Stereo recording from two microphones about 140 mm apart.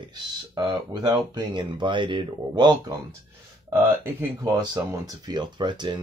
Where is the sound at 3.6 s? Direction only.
20° right (ahead or behind).